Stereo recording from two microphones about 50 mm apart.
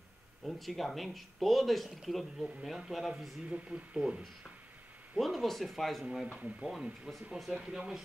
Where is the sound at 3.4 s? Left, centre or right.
Centre.